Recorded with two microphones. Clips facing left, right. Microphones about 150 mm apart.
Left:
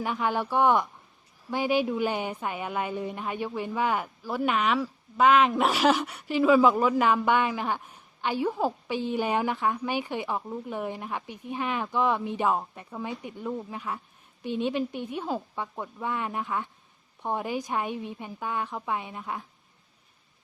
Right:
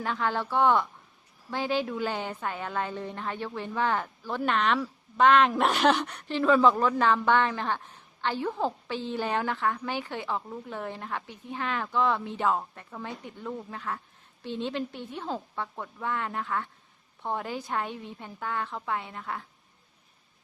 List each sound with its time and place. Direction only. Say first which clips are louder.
0.0 s a woman's voice: left 2 dB; 15° left (ahead or behind)